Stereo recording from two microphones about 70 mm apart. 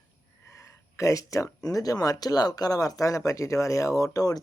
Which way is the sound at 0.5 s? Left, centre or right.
Left.